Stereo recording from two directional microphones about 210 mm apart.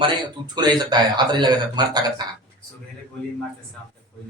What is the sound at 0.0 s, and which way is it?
A man's voice, 20° right (ahead or behind).